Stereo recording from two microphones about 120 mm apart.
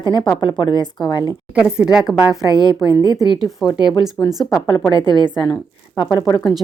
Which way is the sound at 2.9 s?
35° right (ahead or behind).